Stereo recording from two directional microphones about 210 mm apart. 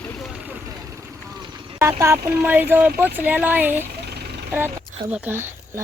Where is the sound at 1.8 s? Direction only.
15° right (ahead or behind).